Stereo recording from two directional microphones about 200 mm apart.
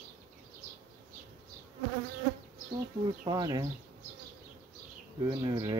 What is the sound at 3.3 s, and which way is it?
Speech, 20° right (ahead or behind).